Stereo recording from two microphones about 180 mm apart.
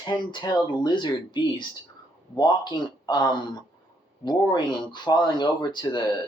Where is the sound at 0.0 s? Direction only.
25° left (ahead or behind).